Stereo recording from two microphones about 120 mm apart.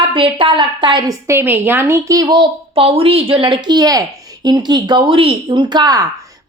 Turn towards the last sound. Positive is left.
turn(degrees=-35)  # may be behind; listen again after turning